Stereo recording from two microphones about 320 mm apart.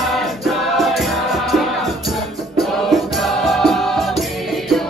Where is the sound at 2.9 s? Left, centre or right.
Centre.